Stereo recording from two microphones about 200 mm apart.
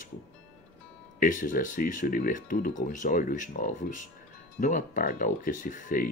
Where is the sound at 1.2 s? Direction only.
40° left (ahead or behind).